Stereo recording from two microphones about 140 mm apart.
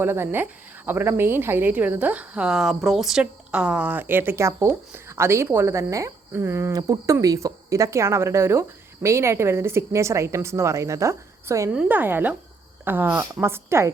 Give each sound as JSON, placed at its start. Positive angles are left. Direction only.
{"t": 0.0, "sound": "a woman's voice", "side_deg": -15}
{"t": 11.7, "sound": "a woman's voice", "side_deg": -10}